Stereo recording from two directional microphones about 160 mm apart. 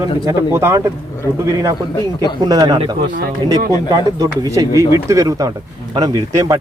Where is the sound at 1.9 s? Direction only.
25° left (ahead or behind).